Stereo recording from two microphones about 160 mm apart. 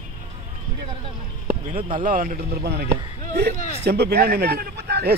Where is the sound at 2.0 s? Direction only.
60° right (ahead or behind).